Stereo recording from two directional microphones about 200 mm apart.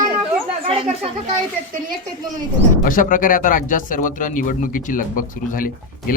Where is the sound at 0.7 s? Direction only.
30° right (ahead or behind).